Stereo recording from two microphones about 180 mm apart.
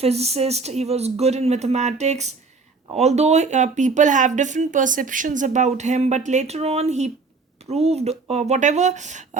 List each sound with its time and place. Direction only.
0.0 s speech: 35° right (ahead or behind)